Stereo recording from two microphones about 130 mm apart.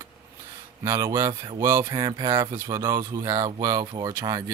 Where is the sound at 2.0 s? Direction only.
35° right (ahead or behind).